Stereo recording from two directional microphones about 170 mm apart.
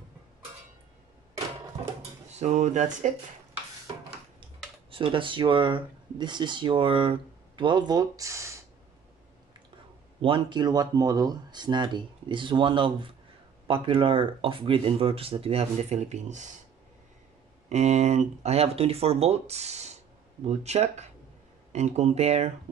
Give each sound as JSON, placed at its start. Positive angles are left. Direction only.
{"t": 2.3, "sound": "speech", "side_deg": -40}
{"t": 4.9, "sound": "speech", "side_deg": -30}
{"t": 10.2, "sound": "speech", "side_deg": -30}
{"t": 17.6, "sound": "speech", "side_deg": -40}